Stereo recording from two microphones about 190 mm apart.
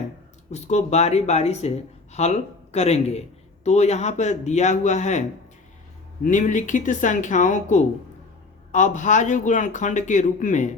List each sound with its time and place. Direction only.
0.5 s a man's voice: 35° left (ahead or behind)
6.2 s a man's voice: 40° left (ahead or behind)